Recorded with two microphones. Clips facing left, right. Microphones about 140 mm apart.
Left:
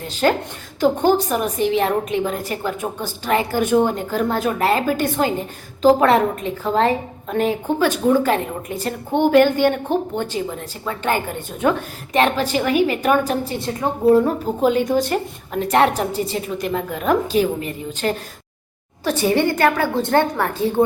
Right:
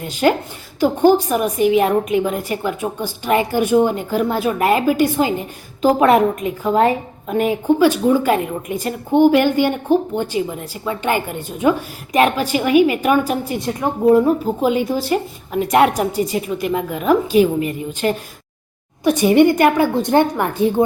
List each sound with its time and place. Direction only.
0.1 s a woman's voice: 10° right (ahead or behind)
19.0 s a woman's voice: 15° right (ahead or behind)